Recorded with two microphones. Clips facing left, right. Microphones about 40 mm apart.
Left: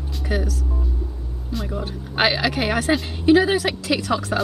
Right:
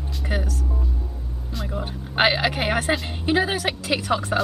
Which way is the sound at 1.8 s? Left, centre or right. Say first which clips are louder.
Right 1 dB; centre.